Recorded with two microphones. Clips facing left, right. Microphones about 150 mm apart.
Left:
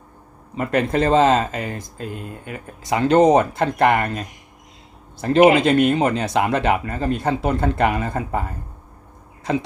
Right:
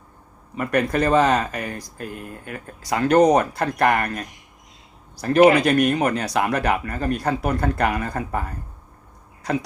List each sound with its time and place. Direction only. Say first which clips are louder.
0.5 s speech: left 1 dB; 25° left (ahead or behind)